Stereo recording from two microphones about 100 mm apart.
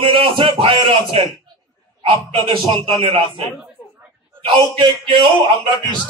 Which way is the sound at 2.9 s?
70° right (ahead or behind).